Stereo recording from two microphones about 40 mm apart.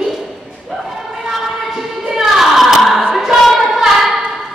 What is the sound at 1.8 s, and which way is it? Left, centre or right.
Music, centre.